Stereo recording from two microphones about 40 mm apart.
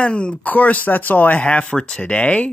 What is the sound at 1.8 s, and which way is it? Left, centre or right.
Speech, left.